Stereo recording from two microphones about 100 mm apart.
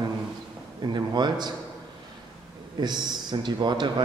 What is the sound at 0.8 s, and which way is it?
Speech, 45° right (ahead or behind).